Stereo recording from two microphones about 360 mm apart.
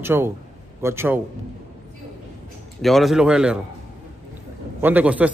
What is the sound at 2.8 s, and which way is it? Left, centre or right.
Speech, centre.